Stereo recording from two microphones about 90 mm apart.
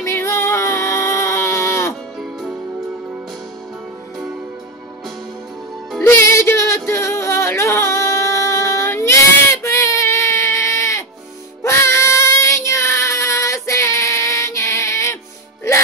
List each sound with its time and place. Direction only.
0.0 s a sound: 30° left (ahead or behind)
6.0 s music: 30° left (ahead or behind)
11.6 s child singing: 30° left (ahead or behind)